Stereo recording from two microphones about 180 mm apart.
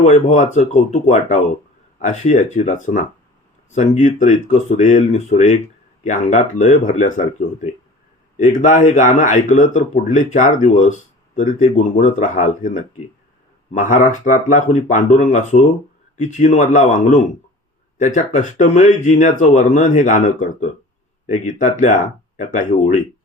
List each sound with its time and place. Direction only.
0.0 s speech: 40° left (ahead or behind)